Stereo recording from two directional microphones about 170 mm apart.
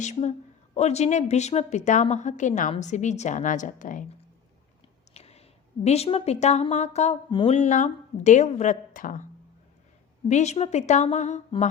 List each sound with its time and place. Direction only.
0.0 s a woman's voice: 45° left (ahead or behind)
5.1 s a sound: 40° left (ahead or behind)
5.8 s a woman's voice: 40° left (ahead or behind)
10.2 s a woman's voice: 40° left (ahead or behind)